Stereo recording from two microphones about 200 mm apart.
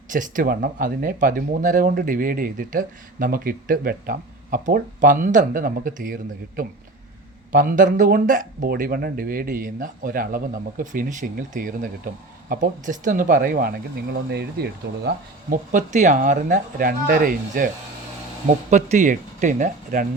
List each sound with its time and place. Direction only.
0.1 s speech: 40° right (ahead or behind)
7.5 s speech: 40° right (ahead or behind)
18.7 s speech: 35° right (ahead or behind)